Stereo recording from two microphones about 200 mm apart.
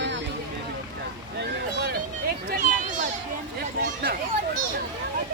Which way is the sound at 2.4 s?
45° right (ahead or behind).